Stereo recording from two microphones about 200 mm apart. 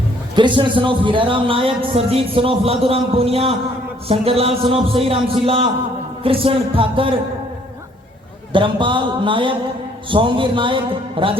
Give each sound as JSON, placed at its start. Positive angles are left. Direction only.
{"t": 0.3, "sound": "a man's voice", "side_deg": -25}
{"t": 8.5, "sound": "a man's voice", "side_deg": -25}